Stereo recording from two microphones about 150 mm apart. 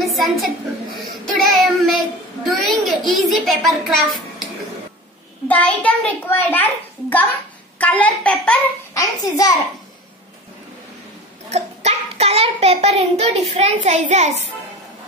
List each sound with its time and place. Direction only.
0.0 s a sound: centre (ahead or behind)
1.2 s child singing: centre (ahead or behind)
2.4 s a sound: centre (ahead or behind)
5.5 s a child's voice: 10° left (ahead or behind)
8.9 s a child's voice: 25° left (ahead or behind)
11.5 s a child's voice: 45° right (ahead or behind)